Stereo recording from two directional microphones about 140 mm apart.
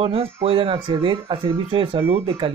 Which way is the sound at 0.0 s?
40° right (ahead or behind).